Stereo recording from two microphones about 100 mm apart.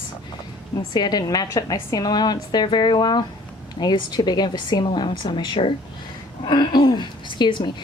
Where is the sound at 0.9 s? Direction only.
45° left (ahead or behind).